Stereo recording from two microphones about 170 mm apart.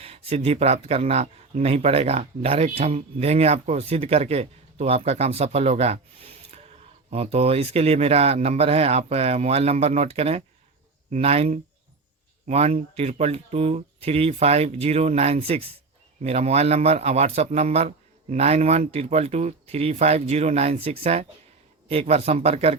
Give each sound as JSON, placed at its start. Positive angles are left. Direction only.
{"t": 0.0, "sound": "a man's voice", "side_deg": -35}